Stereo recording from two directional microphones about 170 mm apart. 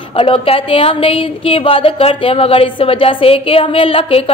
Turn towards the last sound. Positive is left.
turn(degrees=35)  # may be behind; listen again after turning